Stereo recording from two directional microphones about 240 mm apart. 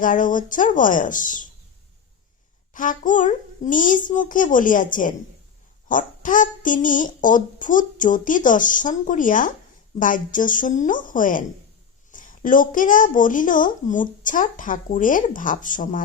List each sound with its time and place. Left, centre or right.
0.0 s a child's voice: left
2.7 s a child's voice: left